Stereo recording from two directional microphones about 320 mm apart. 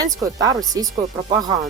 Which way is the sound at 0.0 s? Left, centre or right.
Centre.